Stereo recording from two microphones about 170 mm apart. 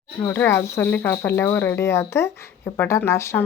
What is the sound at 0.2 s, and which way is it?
Speech, 15° left (ahead or behind).